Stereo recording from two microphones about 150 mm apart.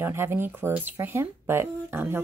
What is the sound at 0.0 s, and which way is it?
Speech, 15° right (ahead or behind).